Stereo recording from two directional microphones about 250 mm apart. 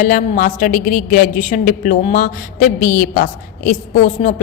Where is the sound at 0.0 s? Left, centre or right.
Left.